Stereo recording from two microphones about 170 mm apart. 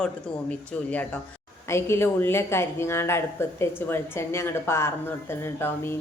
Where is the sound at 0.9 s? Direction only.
10° left (ahead or behind).